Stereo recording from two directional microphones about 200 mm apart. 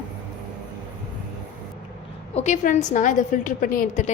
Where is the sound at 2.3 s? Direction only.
35° left (ahead or behind).